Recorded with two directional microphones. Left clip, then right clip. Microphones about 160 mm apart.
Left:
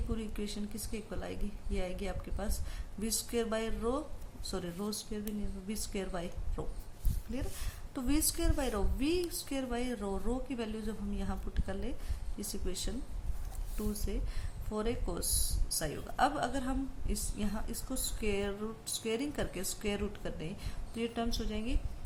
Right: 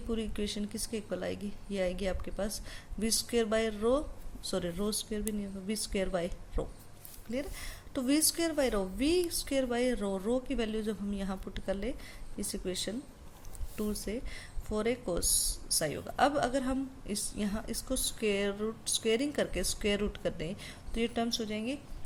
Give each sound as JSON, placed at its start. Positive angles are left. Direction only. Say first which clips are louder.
{"t": 0.1, "sound": "a woman's voice", "louder": "right 5 dB", "side_deg": -45}
{"t": 7.9, "sound": "a woman's voice", "louder": "right 4 dB", "side_deg": -40}